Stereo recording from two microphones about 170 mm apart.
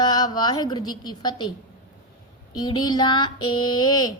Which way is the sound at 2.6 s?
25° left (ahead or behind).